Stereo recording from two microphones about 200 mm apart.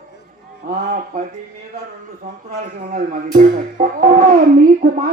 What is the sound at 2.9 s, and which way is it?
Speech, 45° right (ahead or behind).